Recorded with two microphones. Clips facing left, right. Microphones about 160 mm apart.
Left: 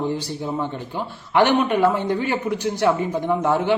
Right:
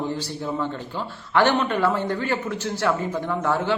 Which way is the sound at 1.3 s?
15° left (ahead or behind).